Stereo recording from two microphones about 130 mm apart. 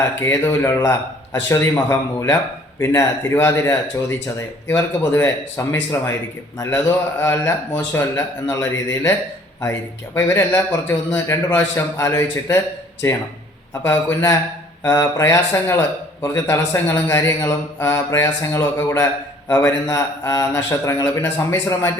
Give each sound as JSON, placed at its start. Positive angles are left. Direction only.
{"t": 0.2, "sound": "a man's voice", "side_deg": 20}
{"t": 10.2, "sound": "a man's voice", "side_deg": 20}
{"t": 13.8, "sound": "a man's voice", "side_deg": 20}